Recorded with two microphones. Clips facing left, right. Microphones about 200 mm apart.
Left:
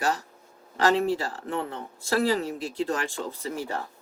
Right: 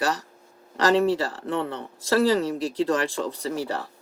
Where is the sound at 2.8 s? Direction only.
90° right.